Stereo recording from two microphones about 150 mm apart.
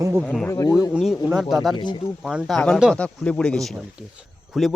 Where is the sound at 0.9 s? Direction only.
5° right (ahead or behind).